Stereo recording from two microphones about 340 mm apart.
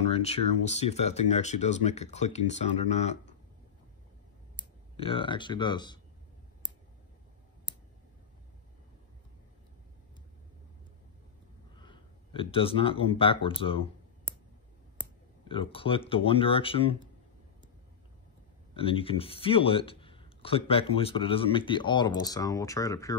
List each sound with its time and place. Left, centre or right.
0.0 s speech: centre
4.9 s speech: centre
11.7 s speech: centre
15.4 s speech: centre
18.7 s speech: centre